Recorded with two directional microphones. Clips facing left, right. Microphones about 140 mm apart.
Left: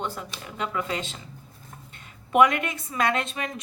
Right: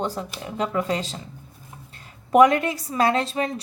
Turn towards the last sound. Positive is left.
turn(degrees=-35)  # may be behind; listen again after turning